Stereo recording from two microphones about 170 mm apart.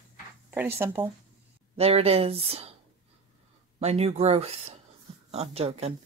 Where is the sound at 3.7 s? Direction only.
40° right (ahead or behind).